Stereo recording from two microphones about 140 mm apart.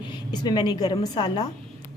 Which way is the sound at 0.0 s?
30° left (ahead or behind).